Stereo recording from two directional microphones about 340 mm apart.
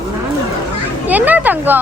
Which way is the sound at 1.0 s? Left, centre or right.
Centre.